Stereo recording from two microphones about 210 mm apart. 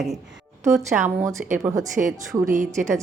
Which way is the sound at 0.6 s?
15° right (ahead or behind).